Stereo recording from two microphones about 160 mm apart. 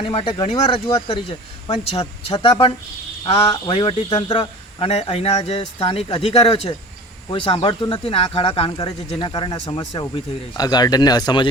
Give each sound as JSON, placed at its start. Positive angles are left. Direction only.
{"t": 0.0, "sound": "speech", "side_deg": 35}